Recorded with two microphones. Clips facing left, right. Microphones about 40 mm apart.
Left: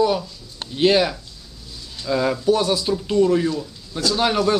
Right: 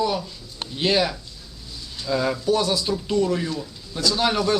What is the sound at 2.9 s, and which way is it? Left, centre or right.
Speech, centre.